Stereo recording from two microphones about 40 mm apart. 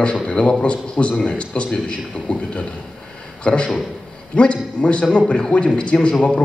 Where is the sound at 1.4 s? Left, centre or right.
Left.